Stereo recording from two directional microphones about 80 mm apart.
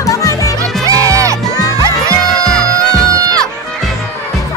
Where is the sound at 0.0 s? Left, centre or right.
Left.